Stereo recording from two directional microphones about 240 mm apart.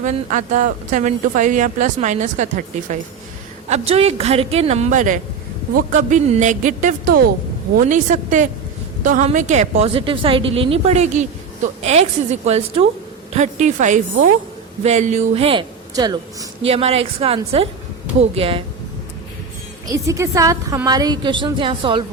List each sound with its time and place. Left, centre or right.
0.0 s a woman's voice: right
20.1 s a woman's voice: centre